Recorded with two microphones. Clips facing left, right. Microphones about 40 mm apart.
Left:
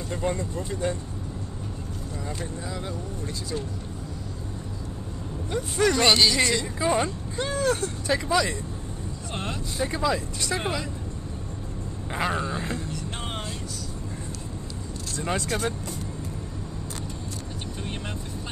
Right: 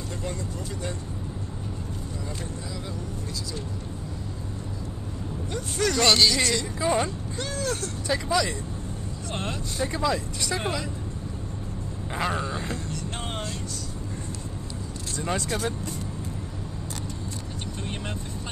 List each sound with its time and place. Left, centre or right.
0.2 s speech: left
5.5 s speech: centre
7.3 s speech: left
8.1 s speech: centre
12.1 s speech: centre
15.1 s speech: centre